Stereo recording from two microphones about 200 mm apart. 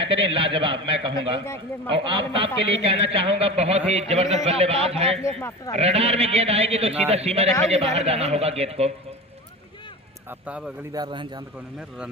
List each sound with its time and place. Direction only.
0.0 s a man's voice: 30° right (ahead or behind)
5.3 s speech: 10° left (ahead or behind)
5.7 s a man's voice: 30° right (ahead or behind)
10.2 s speech: 5° right (ahead or behind)
10.9 s a man's voice: 20° right (ahead or behind)